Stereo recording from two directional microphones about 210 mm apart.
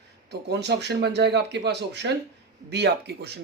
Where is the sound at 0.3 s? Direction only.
55° right (ahead or behind).